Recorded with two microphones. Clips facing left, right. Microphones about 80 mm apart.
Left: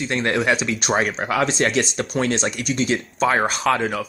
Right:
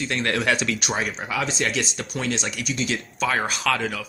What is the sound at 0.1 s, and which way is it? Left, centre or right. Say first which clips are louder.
Speech: left 3 dB; left.